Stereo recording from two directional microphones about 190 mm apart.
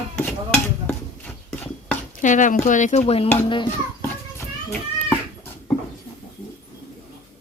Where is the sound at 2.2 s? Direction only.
40° left (ahead or behind).